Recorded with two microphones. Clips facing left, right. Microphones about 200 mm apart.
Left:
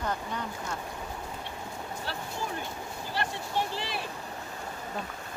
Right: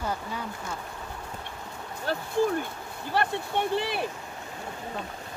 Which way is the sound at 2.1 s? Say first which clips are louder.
Right 10 dB; 45° right (ahead or behind).